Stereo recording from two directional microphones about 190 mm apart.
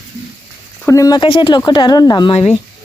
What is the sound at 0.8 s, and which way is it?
Speech, 15° left (ahead or behind).